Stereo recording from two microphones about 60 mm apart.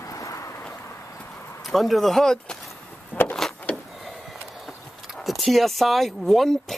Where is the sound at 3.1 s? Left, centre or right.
Left.